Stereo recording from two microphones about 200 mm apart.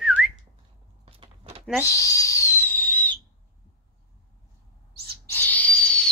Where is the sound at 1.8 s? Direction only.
15° left (ahead or behind).